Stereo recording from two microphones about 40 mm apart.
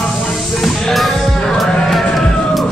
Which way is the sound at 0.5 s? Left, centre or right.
Centre.